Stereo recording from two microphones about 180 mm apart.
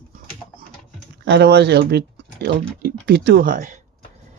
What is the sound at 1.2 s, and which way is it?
Speech, 65° right (ahead or behind).